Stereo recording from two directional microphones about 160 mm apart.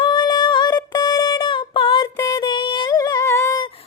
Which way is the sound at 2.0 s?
20° left (ahead or behind).